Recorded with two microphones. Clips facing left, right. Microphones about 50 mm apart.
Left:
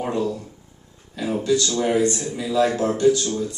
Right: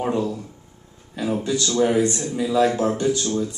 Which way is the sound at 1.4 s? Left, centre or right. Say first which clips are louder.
Even; centre.